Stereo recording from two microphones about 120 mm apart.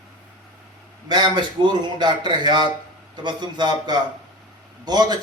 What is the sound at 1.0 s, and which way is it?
A man's voice, 35° right (ahead or behind).